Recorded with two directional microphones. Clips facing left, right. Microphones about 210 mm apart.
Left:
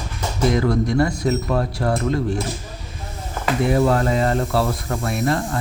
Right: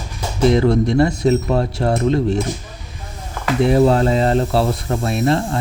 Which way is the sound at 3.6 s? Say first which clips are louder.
Right 4 dB; 25° right (ahead or behind).